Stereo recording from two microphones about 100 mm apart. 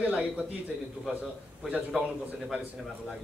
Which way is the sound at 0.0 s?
10° right (ahead or behind).